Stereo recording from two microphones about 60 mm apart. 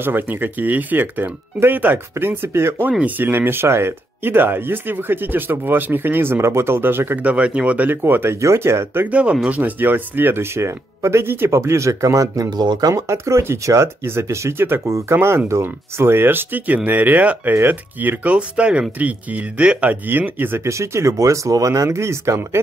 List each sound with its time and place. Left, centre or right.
0.0 s speech: right
7.2 s speech: right
8.4 s speech: right
9.0 s speech: right
9.6 s speech: right
14.9 s speech: right
15.1 s speech: right
18.3 s speech: centre; by 20.6 s right
20.6 s speech: right